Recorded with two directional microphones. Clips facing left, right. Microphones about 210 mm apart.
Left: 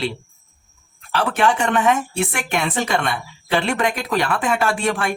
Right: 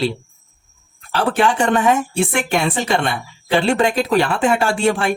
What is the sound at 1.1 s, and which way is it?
Speech, 30° right (ahead or behind).